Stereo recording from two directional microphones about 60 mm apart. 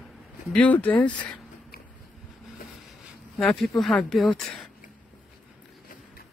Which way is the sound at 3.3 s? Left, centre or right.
Centre.